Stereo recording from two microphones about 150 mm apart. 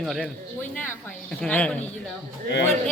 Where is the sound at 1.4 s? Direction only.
10° left (ahead or behind).